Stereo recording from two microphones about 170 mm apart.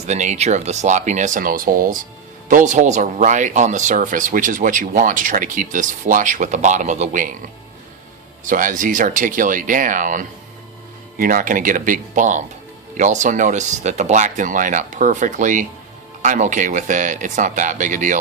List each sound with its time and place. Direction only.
0.1 s speech: 45° right (ahead or behind)
8.4 s speech: 50° right (ahead or behind)